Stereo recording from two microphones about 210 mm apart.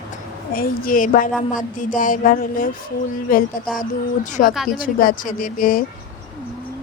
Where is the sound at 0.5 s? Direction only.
45° left (ahead or behind).